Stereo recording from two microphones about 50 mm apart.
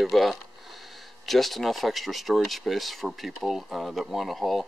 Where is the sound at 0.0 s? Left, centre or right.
Centre.